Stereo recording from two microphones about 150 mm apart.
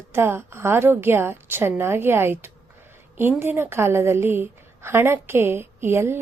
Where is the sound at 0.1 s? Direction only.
15° right (ahead or behind).